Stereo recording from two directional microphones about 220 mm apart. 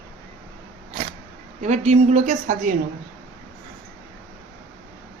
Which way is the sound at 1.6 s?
30° right (ahead or behind).